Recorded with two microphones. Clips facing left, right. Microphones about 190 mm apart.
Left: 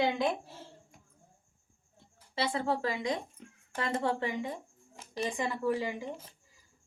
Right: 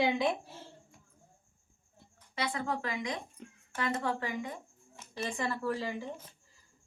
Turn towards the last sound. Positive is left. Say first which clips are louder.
# left 2 dB
turn(degrees=15)  # may be behind; listen again after turning